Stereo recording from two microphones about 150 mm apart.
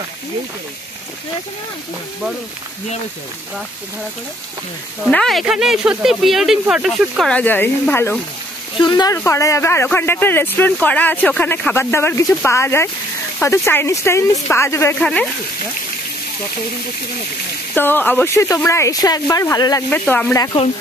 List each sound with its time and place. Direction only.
5.0 s speech: centre (ahead or behind)
8.7 s speech: 30° left (ahead or behind)
9.1 s speech: 15° left (ahead or behind)
17.7 s speech: 15° left (ahead or behind)
19.9 s speech: 10° left (ahead or behind)